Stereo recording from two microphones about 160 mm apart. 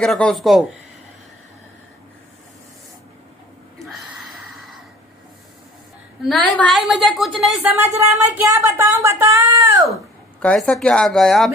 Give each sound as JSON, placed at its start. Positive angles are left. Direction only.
{"t": 0.0, "sound": "a woman's voice", "side_deg": 0}
{"t": 3.8, "sound": "a sound", "side_deg": 0}
{"t": 6.2, "sound": "a woman's voice", "side_deg": 0}
{"t": 7.7, "sound": "speech", "side_deg": -15}
{"t": 10.4, "sound": "a woman's voice", "side_deg": 5}